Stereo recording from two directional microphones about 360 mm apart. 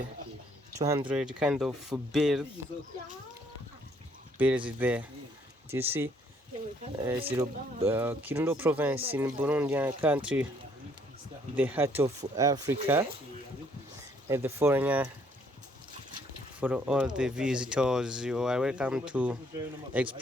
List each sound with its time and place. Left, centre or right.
0.7 s speech: centre
1.0 s speech: centre
4.4 s speech: centre
11.5 s speech: centre
14.3 s speech: centre
16.6 s speech: centre